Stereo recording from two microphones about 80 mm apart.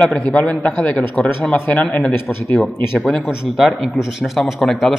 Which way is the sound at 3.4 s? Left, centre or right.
Centre.